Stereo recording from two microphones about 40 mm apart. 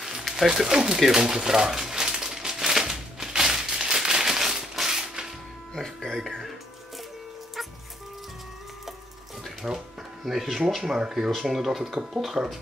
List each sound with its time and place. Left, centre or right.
0.5 s speech: centre
0.9 s speech: centre
1.2 s crumpling: centre
5.8 s music: centre
7.6 s music: centre
9.6 s speech: centre
11.2 s speech: centre